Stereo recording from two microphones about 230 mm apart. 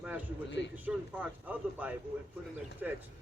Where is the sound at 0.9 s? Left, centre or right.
Centre.